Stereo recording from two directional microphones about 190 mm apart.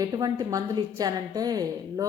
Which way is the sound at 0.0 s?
20° right (ahead or behind).